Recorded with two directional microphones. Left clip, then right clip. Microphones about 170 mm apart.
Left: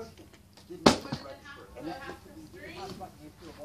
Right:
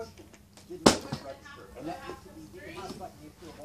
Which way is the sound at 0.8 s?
Centre (ahead or behind).